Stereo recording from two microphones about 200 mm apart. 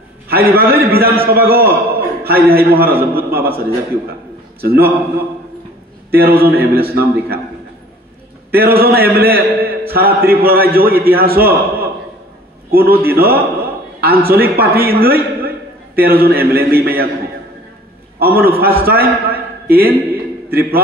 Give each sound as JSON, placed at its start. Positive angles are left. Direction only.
{"t": 0.3, "sound": "a man's voice", "side_deg": -50}
{"t": 6.1, "sound": "a man's voice", "side_deg": -50}
{"t": 8.5, "sound": "a man's voice", "side_deg": -50}
{"t": 18.2, "sound": "a man's voice", "side_deg": -50}